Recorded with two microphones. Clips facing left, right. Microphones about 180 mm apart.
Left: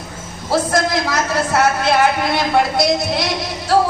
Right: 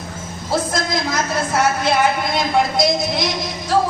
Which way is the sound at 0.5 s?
65° left (ahead or behind).